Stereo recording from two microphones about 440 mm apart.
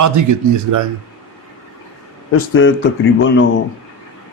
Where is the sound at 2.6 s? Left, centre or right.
Left.